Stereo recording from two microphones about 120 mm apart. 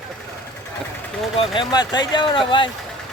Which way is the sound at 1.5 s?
35° left (ahead or behind).